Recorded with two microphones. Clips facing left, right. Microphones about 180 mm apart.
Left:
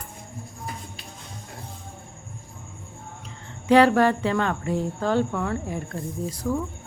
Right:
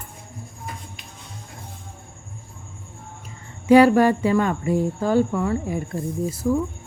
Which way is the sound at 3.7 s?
10° right (ahead or behind).